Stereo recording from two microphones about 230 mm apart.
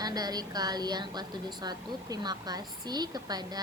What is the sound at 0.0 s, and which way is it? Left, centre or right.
A woman's voice, centre.